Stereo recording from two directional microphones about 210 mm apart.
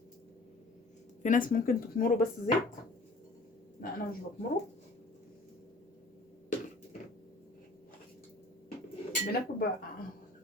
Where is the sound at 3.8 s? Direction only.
45° left (ahead or behind).